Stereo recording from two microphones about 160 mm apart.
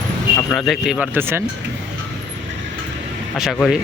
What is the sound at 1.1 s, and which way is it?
Speech, 15° right (ahead or behind).